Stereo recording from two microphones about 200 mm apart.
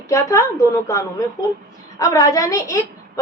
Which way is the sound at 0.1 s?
15° left (ahead or behind).